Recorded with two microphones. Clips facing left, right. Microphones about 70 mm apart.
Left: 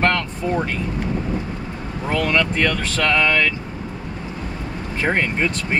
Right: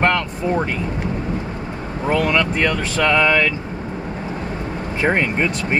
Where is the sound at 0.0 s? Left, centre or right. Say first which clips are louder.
Right 2 dB; centre.